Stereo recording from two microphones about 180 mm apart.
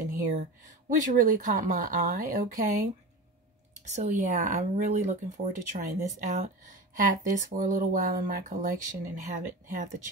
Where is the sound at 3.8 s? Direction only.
40° right (ahead or behind).